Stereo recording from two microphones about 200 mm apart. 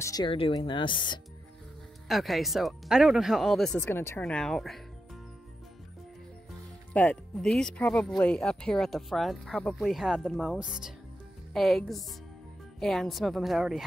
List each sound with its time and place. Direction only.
0.0 s speech: 20° left (ahead or behind)
2.0 s speech: centre (ahead or behind)
3.8 s speech: 10° left (ahead or behind)
6.9 s speech: 5° left (ahead or behind)